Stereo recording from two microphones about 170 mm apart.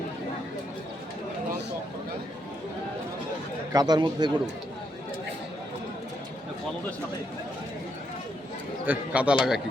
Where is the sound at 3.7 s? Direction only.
25° right (ahead or behind).